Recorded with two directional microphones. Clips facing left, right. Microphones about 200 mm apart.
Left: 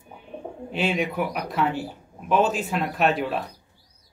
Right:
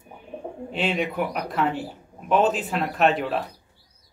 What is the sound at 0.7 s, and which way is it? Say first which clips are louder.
Speech: left 1 dB; centre (ahead or behind).